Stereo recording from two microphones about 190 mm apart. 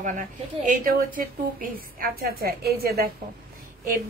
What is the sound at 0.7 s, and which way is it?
A woman's voice, 45° right (ahead or behind).